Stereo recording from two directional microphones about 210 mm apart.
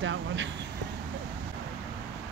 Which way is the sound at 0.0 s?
65° right (ahead or behind).